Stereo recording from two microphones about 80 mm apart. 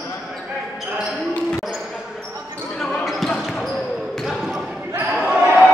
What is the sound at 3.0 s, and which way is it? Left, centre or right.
Basketball bounce, centre.